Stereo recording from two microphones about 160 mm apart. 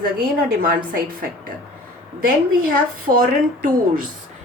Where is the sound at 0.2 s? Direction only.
65° right (ahead or behind).